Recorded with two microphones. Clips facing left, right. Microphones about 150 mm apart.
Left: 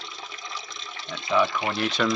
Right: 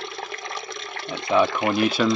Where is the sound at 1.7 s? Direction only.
10° right (ahead or behind).